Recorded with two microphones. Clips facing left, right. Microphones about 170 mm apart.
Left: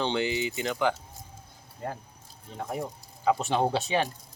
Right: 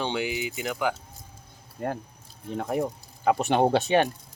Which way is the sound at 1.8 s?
65° right (ahead or behind).